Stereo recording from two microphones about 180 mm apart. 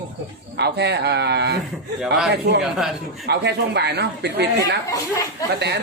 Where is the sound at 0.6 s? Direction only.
70° right (ahead or behind).